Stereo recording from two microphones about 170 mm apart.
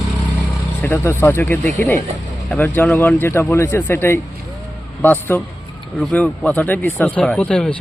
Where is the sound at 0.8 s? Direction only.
15° left (ahead or behind).